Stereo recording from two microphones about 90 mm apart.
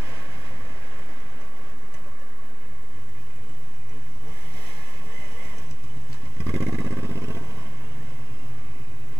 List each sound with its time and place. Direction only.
6.4 s vehicle: 5° right (ahead or behind)
6.7 s vehicle: 20° right (ahead or behind)